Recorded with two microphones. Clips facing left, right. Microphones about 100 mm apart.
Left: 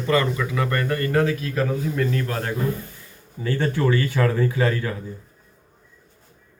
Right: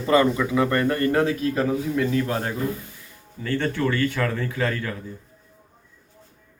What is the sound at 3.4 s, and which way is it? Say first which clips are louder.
A man's voice: left 1 dB; 10° left (ahead or behind).